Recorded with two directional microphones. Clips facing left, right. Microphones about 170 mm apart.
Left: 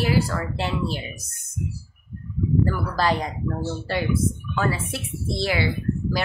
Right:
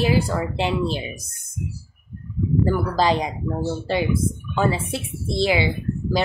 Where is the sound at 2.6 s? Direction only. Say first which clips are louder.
Right 3 dB; 20° right (ahead or behind).